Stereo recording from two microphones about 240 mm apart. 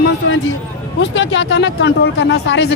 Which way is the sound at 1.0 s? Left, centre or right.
Left.